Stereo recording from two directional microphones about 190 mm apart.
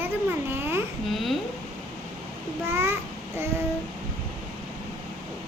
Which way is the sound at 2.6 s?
10° right (ahead or behind).